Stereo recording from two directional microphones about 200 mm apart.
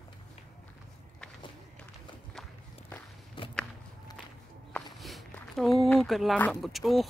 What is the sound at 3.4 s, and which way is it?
Walk, 25° left (ahead or behind).